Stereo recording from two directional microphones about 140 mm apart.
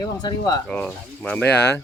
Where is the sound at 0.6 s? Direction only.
5° left (ahead or behind).